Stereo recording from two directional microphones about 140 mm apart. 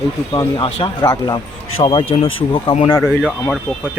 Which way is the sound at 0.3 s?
35° left (ahead or behind).